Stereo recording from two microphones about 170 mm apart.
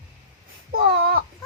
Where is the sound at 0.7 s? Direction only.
70° right (ahead or behind).